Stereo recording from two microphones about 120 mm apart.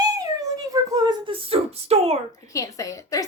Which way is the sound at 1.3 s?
55° right (ahead or behind).